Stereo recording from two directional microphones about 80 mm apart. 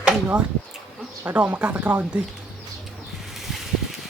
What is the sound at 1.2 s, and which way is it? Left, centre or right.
Speech, centre.